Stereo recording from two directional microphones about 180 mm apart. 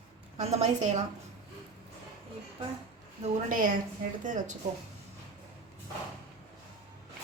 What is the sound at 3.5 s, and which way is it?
Speech, 50° right (ahead or behind).